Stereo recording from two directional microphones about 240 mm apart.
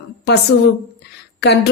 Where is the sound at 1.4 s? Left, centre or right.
Left.